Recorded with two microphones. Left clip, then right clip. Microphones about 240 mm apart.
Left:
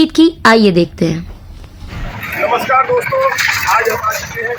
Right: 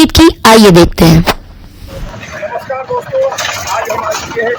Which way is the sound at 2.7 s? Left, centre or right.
Centre.